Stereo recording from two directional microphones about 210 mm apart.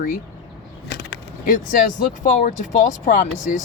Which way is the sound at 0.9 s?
55° left (ahead or behind).